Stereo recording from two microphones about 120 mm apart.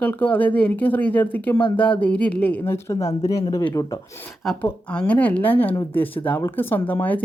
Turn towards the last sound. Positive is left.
turn(degrees=15)  # may be behind; listen again after turning